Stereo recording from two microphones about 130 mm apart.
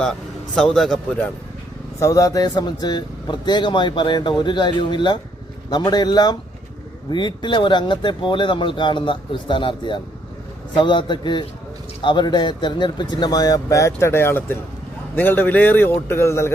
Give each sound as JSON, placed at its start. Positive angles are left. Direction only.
{"t": 0.5, "sound": "a man's voice", "side_deg": 5}
{"t": 2.0, "sound": "a man's voice", "side_deg": 25}